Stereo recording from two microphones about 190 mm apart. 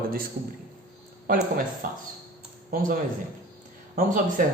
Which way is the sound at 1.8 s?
50° right (ahead or behind).